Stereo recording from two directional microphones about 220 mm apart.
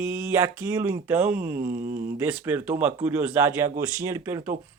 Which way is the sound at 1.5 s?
40° right (ahead or behind).